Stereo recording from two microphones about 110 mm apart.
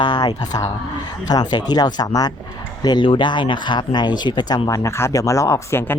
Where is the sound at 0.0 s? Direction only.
40° left (ahead or behind).